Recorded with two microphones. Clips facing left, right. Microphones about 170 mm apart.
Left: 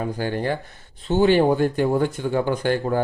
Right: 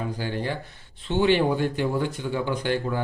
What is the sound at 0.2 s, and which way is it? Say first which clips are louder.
Speech: left 5 dB; 50° left (ahead or behind).